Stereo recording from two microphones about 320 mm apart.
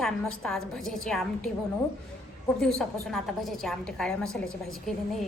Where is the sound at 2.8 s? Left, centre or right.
Centre.